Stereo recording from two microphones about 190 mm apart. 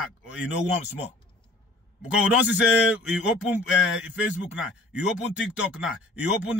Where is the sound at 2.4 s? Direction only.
5° right (ahead or behind).